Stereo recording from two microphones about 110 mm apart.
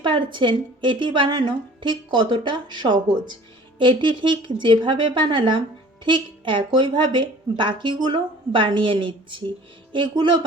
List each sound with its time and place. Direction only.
0.0 s a woman's voice: 50° right (ahead or behind)